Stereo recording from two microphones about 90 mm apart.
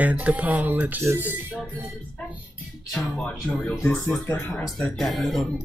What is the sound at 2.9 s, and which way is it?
A woman's voice, 10° left (ahead or behind).